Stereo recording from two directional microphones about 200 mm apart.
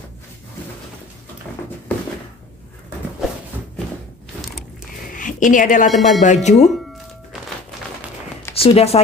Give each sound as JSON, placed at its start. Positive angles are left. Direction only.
{"t": 5.1, "sound": "a sound", "side_deg": 40}
{"t": 5.9, "sound": "a man's voice", "side_deg": 0}
{"t": 6.2, "sound": "speech", "side_deg": 35}
{"t": 8.5, "sound": "speech", "side_deg": 30}